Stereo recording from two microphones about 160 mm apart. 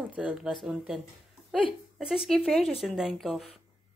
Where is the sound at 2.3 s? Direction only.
Centre (ahead or behind).